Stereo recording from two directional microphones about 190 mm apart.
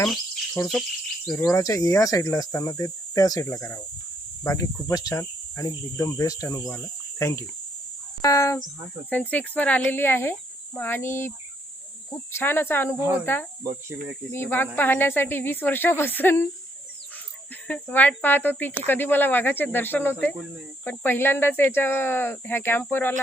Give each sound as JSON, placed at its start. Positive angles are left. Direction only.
{"t": 0.6, "sound": "speech", "side_deg": 15}
{"t": 1.3, "sound": "cricket", "side_deg": 5}
{"t": 1.5, "sound": "speech", "side_deg": 15}
{"t": 12.4, "sound": "speech", "side_deg": 10}
{"t": 17.7, "sound": "speech", "side_deg": 10}